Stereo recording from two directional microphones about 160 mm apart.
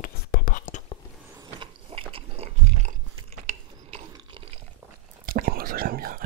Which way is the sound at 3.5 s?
35° right (ahead or behind).